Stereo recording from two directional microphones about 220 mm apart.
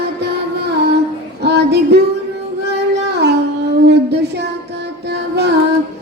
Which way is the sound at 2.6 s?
50° right (ahead or behind).